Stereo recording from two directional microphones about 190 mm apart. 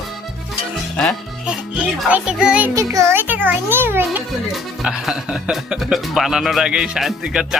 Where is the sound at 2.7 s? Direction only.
15° right (ahead or behind).